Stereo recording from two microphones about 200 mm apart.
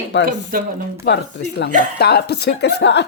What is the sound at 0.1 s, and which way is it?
Speech, 60° left (ahead or behind).